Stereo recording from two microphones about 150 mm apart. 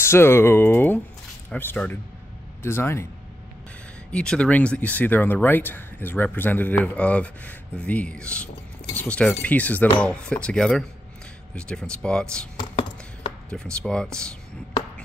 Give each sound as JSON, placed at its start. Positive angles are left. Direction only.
{"t": 0.0, "sound": "speech", "side_deg": 15}
{"t": 4.1, "sound": "speech", "side_deg": 5}
{"t": 13.5, "sound": "speech", "side_deg": 5}